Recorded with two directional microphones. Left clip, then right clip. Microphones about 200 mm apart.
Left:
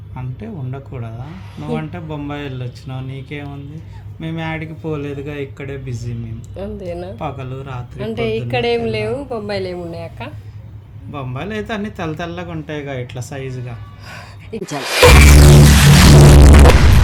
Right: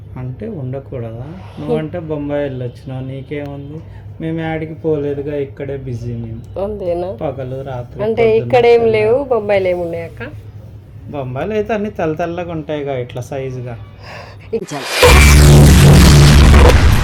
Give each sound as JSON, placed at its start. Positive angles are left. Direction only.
{"t": 1.9, "sound": "speech", "side_deg": 50}
{"t": 6.6, "sound": "speech", "side_deg": 5}
{"t": 7.2, "sound": "speech", "side_deg": 50}
{"t": 7.9, "sound": "a woman's voice", "side_deg": 10}
{"t": 11.3, "sound": "speech", "side_deg": 45}
{"t": 14.1, "sound": "gasp", "side_deg": 15}
{"t": 14.6, "sound": "music", "side_deg": 0}